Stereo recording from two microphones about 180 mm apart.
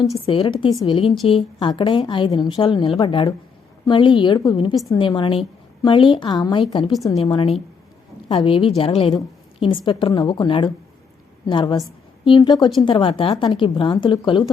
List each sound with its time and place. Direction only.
0.3 s a woman's voice: 30° left (ahead or behind)